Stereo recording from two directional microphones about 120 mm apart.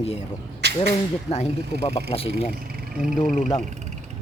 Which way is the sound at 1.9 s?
55° left (ahead or behind).